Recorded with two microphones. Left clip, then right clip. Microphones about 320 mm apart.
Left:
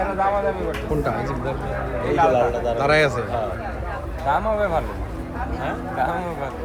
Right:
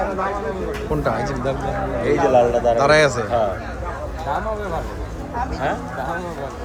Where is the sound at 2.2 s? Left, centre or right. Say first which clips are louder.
Right 3 dB; right.